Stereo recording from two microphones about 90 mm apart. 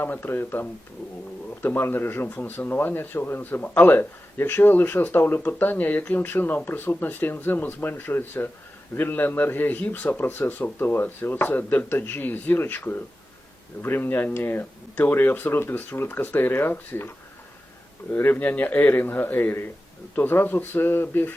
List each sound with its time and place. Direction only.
0.0 s speech: 25° left (ahead or behind)
18.1 s speech: 20° left (ahead or behind)